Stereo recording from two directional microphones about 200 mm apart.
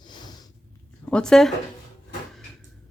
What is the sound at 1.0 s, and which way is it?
Speech, 5° left (ahead or behind).